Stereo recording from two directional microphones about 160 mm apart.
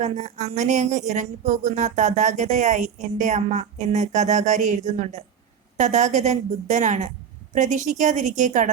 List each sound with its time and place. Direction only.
0.0 s speech: 45° right (ahead or behind)